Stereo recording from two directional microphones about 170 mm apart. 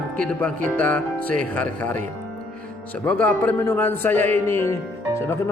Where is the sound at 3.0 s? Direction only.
10° left (ahead or behind).